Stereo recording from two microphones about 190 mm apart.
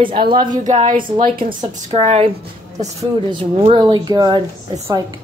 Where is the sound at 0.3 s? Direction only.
25° right (ahead or behind).